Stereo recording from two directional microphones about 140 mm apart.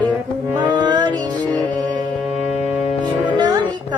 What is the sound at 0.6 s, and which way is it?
Music, 30° right (ahead or behind).